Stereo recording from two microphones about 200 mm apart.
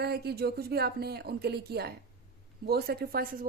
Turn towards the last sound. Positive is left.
turn(degrees=-45)  # may be behind; listen again after turning